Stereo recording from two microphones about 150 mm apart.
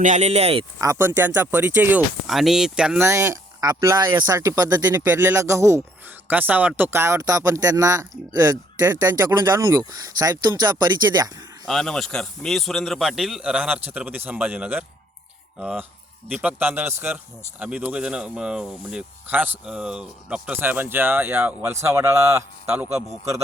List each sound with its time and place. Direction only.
0.0 s speech: 50° right (ahead or behind)
0.8 s speech: 20° right (ahead or behind)
3.1 s speech: 15° right (ahead or behind)
11.6 s speech: centre (ahead or behind); by 23.4 s 20° right (ahead or behind)